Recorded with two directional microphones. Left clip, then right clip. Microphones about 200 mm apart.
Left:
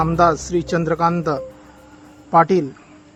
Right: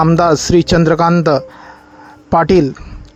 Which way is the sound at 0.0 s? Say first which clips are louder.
Right 5 dB; 40° right (ahead or behind).